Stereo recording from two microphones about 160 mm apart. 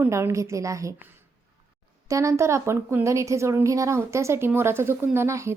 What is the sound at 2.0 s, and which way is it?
A woman's voice, 20° right (ahead or behind).